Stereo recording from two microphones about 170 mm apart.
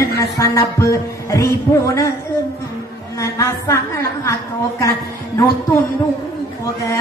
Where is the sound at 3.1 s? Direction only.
20° left (ahead or behind).